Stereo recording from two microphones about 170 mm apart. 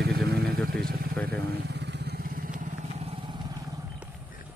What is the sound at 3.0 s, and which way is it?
Vehicle, 35° right (ahead or behind).